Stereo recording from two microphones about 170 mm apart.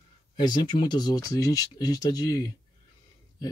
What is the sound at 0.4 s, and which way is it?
Speech, 25° left (ahead or behind).